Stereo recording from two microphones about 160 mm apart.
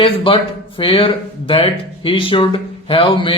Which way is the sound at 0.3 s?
35° left (ahead or behind).